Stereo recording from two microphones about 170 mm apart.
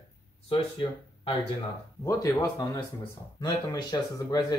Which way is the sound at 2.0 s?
20° left (ahead or behind).